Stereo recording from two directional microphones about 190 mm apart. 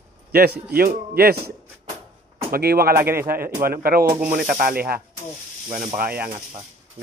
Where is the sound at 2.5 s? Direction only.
55° right (ahead or behind).